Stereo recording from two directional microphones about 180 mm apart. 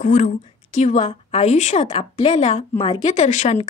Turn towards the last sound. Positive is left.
turn(degrees=40)  # may be behind; listen again after turning